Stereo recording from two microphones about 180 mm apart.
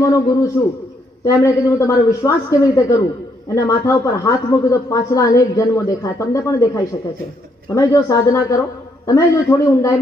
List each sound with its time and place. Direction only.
0.0 s a woman's voice: 20° left (ahead or behind)